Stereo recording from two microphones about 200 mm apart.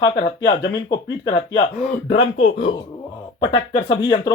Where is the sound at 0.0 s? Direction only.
20° left (ahead or behind).